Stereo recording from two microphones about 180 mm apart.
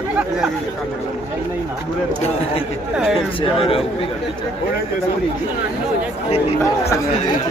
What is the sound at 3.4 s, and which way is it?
Speech, 30° left (ahead or behind).